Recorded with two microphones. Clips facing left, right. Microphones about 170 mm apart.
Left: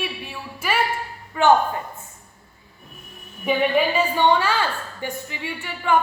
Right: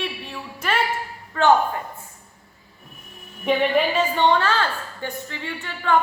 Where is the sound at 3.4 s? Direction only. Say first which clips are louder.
Even; 5° left (ahead or behind).